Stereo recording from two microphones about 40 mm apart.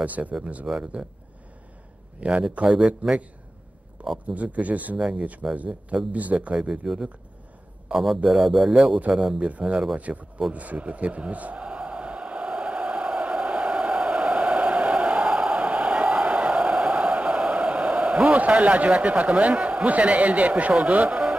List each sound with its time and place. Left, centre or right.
0.0 s speech: right
0.7 s a man's voice: right
2.1 s a man's voice: right
4.3 s speech: right
4.9 s a man's voice: right
6.1 s speech: right
6.6 s speech: centre
8.3 s speech: centre
9.4 s speech: right
10.5 s a sound: right